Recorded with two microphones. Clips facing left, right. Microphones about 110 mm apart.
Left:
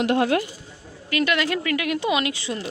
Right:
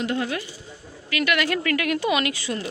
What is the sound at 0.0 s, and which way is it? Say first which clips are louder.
Speech: left 6 dB; 70° left (ahead or behind).